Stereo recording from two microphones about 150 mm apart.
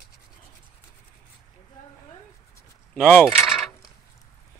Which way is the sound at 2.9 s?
5° left (ahead or behind).